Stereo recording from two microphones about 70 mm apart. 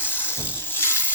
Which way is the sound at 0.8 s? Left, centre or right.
Left.